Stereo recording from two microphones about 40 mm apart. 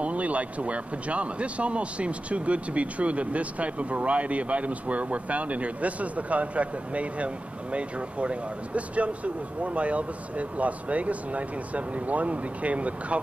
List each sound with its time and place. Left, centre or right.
0.0 s speech: right